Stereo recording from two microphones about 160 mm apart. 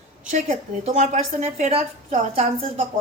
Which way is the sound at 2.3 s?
35° right (ahead or behind).